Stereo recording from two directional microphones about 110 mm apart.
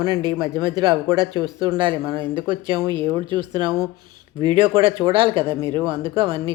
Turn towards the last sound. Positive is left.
turn(degrees=-50)  # may be behind; listen again after turning